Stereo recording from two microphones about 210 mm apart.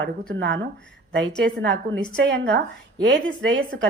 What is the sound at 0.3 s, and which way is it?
A woman's voice, 60° right (ahead or behind).